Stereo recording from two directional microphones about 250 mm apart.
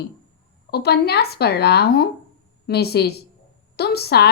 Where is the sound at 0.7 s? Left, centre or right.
Left.